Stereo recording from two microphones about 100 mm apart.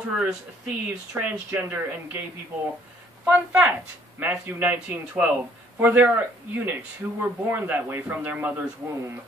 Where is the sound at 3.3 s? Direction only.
20° right (ahead or behind).